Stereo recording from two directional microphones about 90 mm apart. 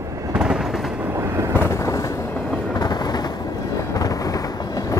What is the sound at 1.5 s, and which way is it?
Vehicle, 25° left (ahead or behind).